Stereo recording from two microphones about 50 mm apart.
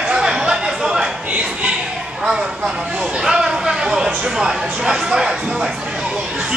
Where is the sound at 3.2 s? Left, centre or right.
Centre.